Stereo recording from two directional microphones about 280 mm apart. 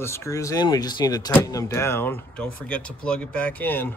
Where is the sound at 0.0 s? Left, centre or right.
Centre.